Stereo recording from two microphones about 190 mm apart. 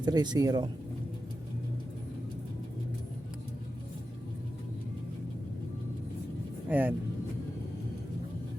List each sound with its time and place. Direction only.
0.0 s speech: 20° right (ahead or behind)
6.7 s speech: 10° right (ahead or behind)